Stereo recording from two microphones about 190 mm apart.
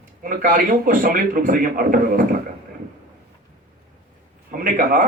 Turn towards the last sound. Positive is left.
turn(degrees=-45)  # may be behind; listen again after turning